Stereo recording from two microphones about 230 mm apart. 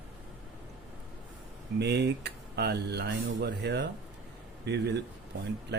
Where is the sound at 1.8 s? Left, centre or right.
Right.